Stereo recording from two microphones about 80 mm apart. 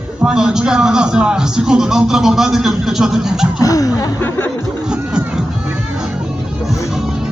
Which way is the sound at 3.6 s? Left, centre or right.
Left.